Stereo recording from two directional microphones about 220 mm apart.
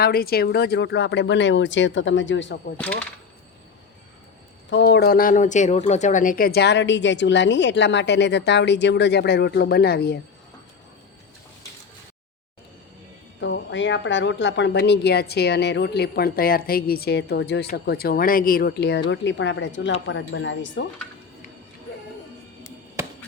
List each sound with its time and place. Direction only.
0.0 s speech: 45° left (ahead or behind)
2.7 s speech: 5° left (ahead or behind)
4.7 s speech: 50° left (ahead or behind)
13.4 s speech: 55° left (ahead or behind)